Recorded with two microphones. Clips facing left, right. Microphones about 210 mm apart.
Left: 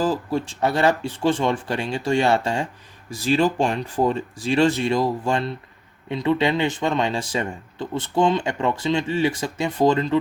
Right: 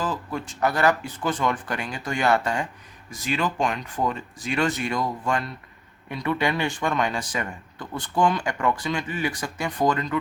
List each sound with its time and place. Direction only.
0.0 s speech: 35° left (ahead or behind)